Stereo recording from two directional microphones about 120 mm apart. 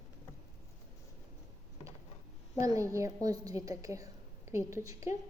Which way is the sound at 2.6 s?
25° right (ahead or behind).